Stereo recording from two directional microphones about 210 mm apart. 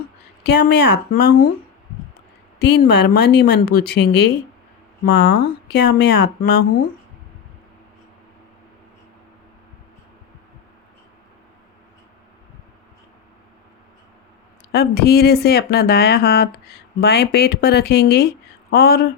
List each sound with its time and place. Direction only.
0.4 s speech: 55° left (ahead or behind)
2.6 s speech: 50° left (ahead or behind)
14.7 s speech: 50° left (ahead or behind)